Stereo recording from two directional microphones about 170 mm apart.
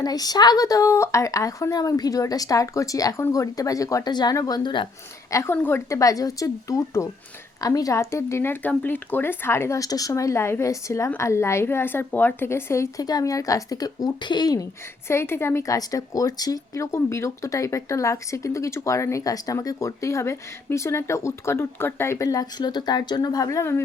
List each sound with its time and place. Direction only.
0.0 s speech: 20° left (ahead or behind)
5.3 s speech: 15° left (ahead or behind)